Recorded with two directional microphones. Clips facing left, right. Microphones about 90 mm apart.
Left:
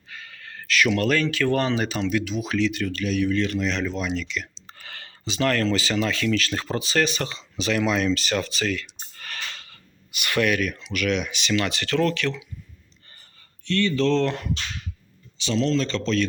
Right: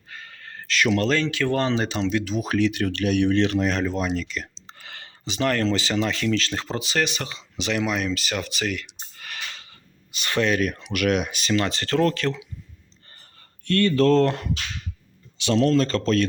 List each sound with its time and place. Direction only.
0.1 s speech: 30° right (ahead or behind)
2.3 s speech: 45° right (ahead or behind); by 3.7 s 65° right (ahead or behind)
3.7 s speech: 40° right (ahead or behind)
4.6 s speech: 20° right (ahead or behind)
7.9 s a sound: 10° right (ahead or behind)
10.1 s speech: 30° right (ahead or behind)
10.6 s speech: 50° right (ahead or behind)
13.7 s speech: 50° right (ahead or behind)
15.4 s speech: 55° right (ahead or behind)